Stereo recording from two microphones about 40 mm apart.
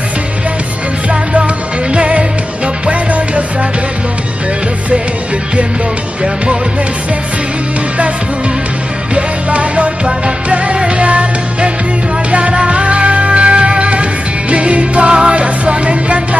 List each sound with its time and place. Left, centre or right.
1.3 s music: right
9.1 s music: right